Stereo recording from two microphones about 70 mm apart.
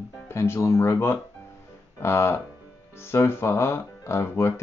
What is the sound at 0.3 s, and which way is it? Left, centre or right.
Speech, left.